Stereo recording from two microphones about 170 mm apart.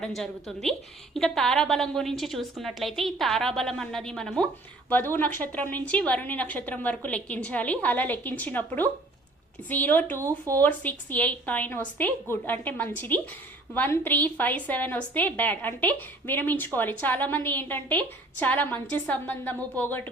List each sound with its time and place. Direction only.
0.0 s a woman's voice: centre (ahead or behind)
10.2 s speech: 20° right (ahead or behind)
10.6 s a woman's voice: 10° left (ahead or behind)